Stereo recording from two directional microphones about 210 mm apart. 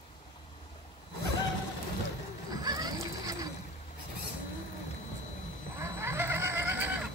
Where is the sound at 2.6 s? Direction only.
20° right (ahead or behind).